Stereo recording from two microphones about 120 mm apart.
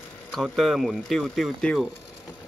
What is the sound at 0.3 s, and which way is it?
Speech, centre (ahead or behind).